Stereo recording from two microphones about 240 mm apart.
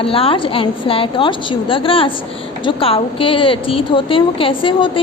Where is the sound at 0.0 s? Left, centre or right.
Left.